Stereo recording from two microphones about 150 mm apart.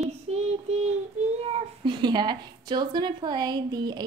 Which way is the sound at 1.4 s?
35° right (ahead or behind).